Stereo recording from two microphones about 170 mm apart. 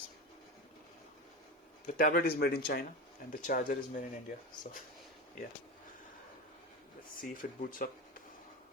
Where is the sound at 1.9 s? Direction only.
50° left (ahead or behind).